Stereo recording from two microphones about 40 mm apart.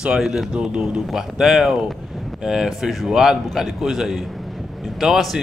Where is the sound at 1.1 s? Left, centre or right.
Centre.